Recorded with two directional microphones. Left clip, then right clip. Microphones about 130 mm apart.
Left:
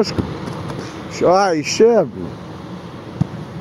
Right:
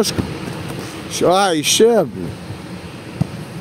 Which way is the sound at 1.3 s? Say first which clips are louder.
Left 1 dB; 90° right.